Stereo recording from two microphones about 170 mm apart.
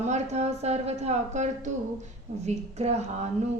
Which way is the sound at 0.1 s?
40° right (ahead or behind).